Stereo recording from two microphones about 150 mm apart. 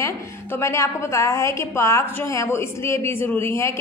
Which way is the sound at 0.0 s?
20° left (ahead or behind).